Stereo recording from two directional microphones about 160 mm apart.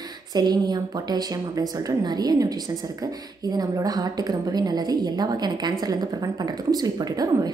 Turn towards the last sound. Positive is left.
turn(degrees=-25)  # may be behind; listen again after turning